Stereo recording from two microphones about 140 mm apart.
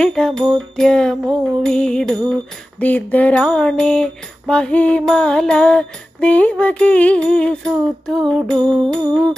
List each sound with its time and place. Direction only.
0.0 s music: 5° left (ahead or behind)
2.8 s a sound: 10° left (ahead or behind)
8.5 s music: 5° left (ahead or behind)